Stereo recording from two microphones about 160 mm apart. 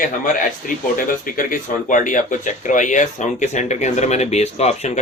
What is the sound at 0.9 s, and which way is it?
A man's voice, 60° left (ahead or behind).